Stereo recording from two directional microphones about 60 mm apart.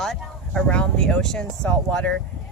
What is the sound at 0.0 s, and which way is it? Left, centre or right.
Speech, centre.